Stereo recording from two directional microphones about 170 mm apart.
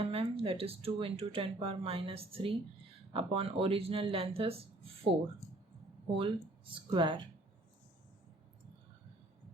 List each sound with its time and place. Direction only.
0.0 s speech: 35° right (ahead or behind)
6.1 s speech: 30° right (ahead or behind)